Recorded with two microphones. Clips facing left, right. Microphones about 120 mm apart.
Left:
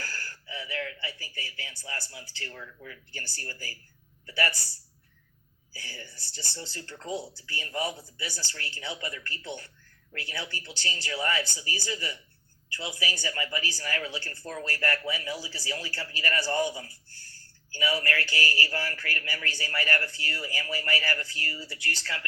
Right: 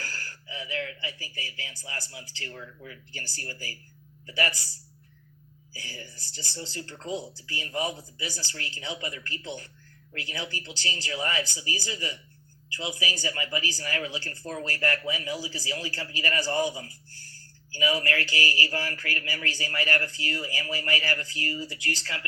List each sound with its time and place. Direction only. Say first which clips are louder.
0.0 s speech: even; 20° right (ahead or behind)
5.8 s speech: right 2 dB; 15° right (ahead or behind)